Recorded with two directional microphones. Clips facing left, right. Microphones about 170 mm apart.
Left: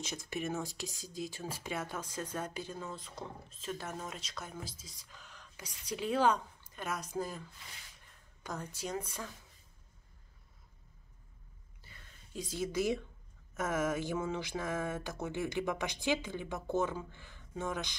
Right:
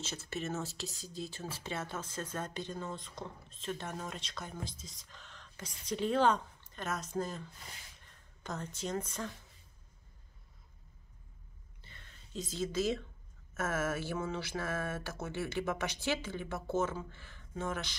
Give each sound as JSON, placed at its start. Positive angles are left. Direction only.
{"t": 0.0, "sound": "speech", "side_deg": 15}
{"t": 8.5, "sound": "speech", "side_deg": 10}
{"t": 11.8, "sound": "a sound", "side_deg": 10}
{"t": 13.6, "sound": "speech", "side_deg": 15}